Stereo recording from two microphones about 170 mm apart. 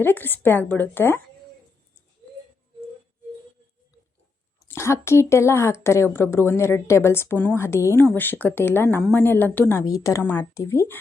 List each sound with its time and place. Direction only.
0.0 s speech: 10° left (ahead or behind)
4.7 s speech: 15° left (ahead or behind)